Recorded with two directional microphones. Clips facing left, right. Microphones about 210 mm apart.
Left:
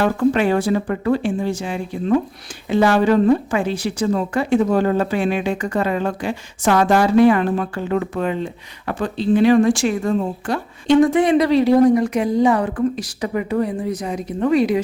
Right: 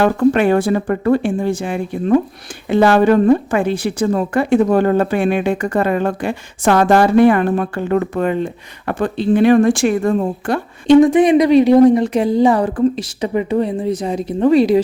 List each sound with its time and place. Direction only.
0.2 s speech: 55° right (ahead or behind)
11.0 s speech: 15° right (ahead or behind); by 13.1 s 35° right (ahead or behind)
13.2 s speech: 25° right (ahead or behind)